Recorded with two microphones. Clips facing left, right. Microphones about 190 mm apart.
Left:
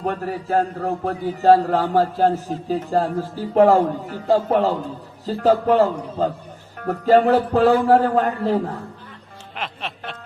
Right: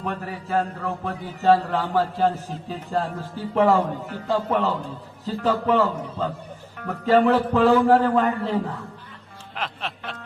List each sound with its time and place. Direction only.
0.0 s a man's voice: 40° left (ahead or behind)
9.6 s music: centre (ahead or behind)